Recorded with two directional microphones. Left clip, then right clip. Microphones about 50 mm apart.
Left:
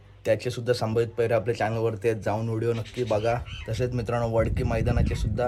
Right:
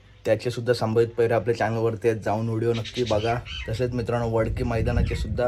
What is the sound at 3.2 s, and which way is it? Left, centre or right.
Speech, left.